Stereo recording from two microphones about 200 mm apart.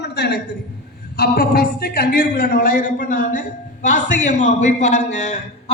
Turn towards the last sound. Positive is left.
turn(degrees=35)  # may be behind; listen again after turning